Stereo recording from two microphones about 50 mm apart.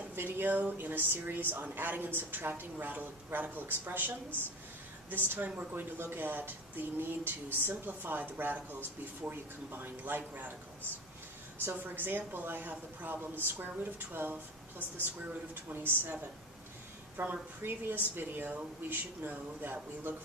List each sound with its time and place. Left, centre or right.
0.1 s speech: right
5.1 s speech: right
11.7 s speech: right
15.7 s speech: right